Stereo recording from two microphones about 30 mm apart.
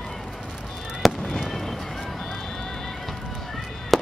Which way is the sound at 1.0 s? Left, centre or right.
Centre.